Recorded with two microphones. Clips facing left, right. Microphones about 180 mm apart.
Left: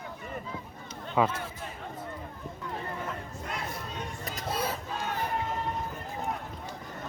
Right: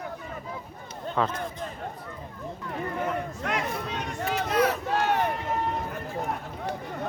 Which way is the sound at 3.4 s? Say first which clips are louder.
Right 7 dB; 80° right.